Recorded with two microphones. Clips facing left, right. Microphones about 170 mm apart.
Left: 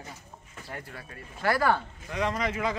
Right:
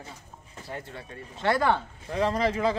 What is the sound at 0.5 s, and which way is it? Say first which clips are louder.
Speech: right 3 dB; 25° right (ahead or behind).